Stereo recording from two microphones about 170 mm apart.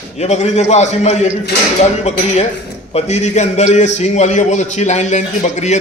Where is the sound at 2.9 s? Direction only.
40° left (ahead or behind).